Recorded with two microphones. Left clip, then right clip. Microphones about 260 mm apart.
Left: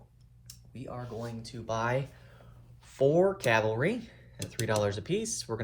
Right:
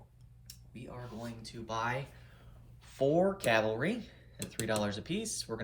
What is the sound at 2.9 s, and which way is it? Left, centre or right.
Speech, left.